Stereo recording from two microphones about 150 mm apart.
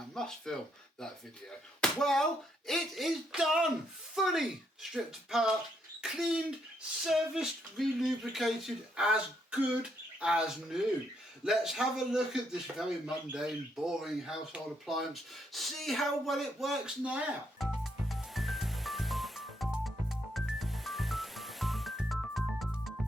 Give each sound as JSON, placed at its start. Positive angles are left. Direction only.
{"t": 0.1, "sound": "speech", "side_deg": 5}
{"t": 1.8, "sound": "a child's voice", "side_deg": 5}
{"t": 11.4, "sound": "a sound", "side_deg": -5}